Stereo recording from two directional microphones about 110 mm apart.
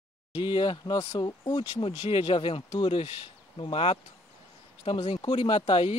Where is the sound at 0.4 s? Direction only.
45° left (ahead or behind).